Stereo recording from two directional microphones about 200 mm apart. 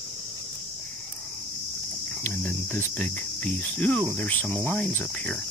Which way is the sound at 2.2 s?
10° left (ahead or behind).